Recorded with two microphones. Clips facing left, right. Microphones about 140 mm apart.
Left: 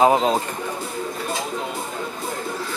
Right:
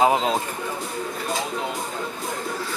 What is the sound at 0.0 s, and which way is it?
Speech, 35° left (ahead or behind).